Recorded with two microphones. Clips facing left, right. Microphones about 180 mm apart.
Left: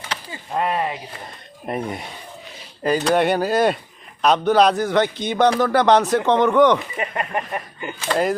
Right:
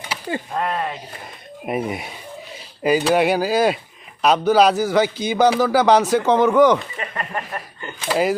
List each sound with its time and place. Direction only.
0.1 s chop: 10° right (ahead or behind)
0.5 s speech: 10° left (ahead or behind)
1.6 s a man's voice: 10° right (ahead or behind)
6.7 s speech: 15° left (ahead or behind)
8.0 s a man's voice: 5° right (ahead or behind)